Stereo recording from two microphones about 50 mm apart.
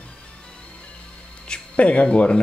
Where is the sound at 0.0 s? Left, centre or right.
Centre.